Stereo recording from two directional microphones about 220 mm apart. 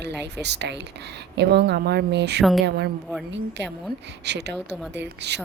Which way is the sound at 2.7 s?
45° right (ahead or behind).